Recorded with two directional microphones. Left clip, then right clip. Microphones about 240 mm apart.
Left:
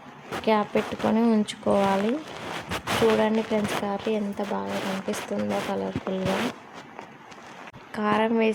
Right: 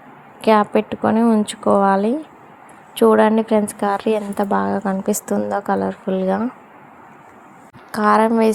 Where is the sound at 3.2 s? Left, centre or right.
Centre.